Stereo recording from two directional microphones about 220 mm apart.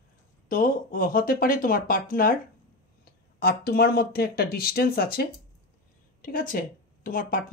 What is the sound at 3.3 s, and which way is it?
Speech, 45° left (ahead or behind).